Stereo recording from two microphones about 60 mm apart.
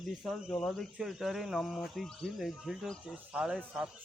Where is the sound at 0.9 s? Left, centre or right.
Centre.